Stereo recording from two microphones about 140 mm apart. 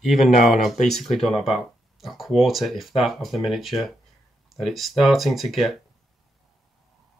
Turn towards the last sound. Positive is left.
turn(degrees=0)  # may be behind; listen again after turning